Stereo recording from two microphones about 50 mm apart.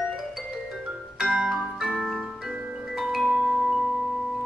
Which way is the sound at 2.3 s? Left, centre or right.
Centre.